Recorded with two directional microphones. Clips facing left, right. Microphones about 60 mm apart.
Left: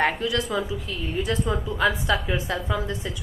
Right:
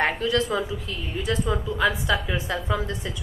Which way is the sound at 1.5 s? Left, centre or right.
Left.